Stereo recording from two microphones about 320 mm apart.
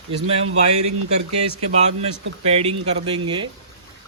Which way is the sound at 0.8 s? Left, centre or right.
Right.